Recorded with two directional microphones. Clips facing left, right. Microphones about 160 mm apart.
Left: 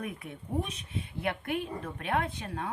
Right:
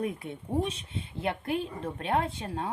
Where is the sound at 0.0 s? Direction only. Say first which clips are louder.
Right 6 dB; 30° right (ahead or behind).